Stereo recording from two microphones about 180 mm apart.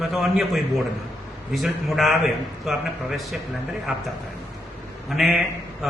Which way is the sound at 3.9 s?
5° right (ahead or behind).